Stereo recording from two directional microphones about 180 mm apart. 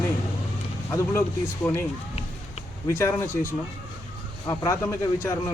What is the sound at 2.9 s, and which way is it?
Speech, 15° left (ahead or behind).